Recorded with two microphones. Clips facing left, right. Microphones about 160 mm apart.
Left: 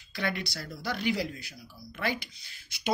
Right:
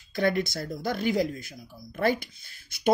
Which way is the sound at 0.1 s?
45° right (ahead or behind).